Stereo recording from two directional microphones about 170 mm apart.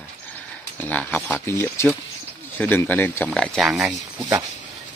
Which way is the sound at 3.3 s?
Centre (ahead or behind).